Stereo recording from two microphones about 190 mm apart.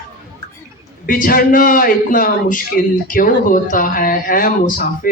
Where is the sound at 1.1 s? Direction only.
50° left (ahead or behind).